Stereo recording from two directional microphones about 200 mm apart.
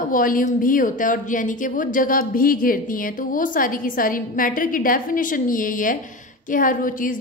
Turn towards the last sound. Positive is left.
turn(degrees=45)  # may be behind; listen again after turning